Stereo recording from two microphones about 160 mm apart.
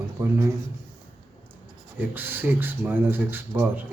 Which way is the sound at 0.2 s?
15° right (ahead or behind).